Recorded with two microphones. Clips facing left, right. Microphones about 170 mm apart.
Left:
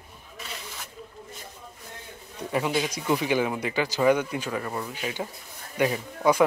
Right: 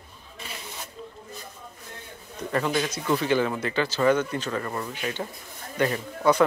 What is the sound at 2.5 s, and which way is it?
Speech, 10° left (ahead or behind).